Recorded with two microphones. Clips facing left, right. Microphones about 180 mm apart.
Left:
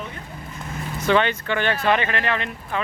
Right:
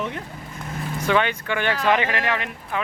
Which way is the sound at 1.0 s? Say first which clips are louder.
Left 2 dB; 10° right (ahead or behind).